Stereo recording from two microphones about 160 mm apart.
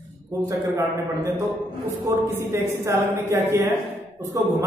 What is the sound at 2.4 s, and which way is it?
A woman's voice, 15° right (ahead or behind).